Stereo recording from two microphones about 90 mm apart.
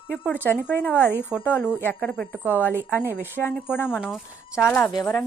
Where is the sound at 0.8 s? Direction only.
20° left (ahead or behind).